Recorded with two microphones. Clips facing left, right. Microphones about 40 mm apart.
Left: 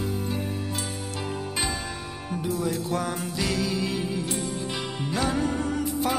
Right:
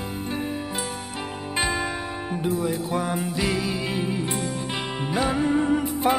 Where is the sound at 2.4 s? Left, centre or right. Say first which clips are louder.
Right 2 dB; right.